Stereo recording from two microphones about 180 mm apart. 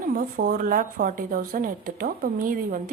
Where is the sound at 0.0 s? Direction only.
50° right (ahead or behind).